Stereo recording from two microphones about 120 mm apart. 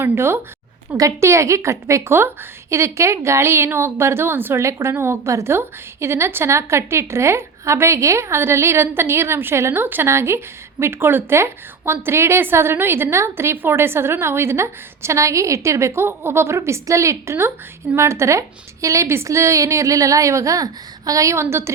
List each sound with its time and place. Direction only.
0.0 s a woman's voice: 20° right (ahead or behind)